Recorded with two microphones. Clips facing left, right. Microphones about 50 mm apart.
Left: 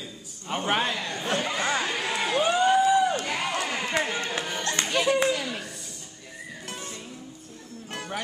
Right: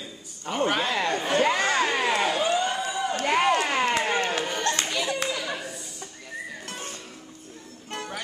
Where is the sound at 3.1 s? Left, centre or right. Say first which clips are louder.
Right 6 dB; right.